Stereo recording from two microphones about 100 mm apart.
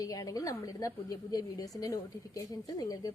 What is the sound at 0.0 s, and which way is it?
A woman's voice, 35° left (ahead or behind).